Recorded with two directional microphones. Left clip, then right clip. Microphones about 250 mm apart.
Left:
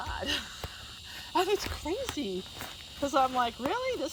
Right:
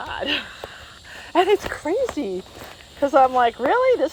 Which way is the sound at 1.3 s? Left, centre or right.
Centre.